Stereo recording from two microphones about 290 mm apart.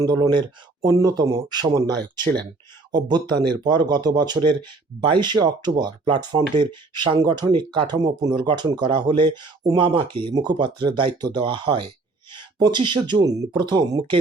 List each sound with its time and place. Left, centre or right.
0.0 s speech: centre
2.9 s speech: centre